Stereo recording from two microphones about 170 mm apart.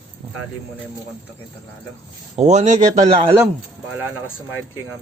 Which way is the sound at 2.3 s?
40° right (ahead or behind).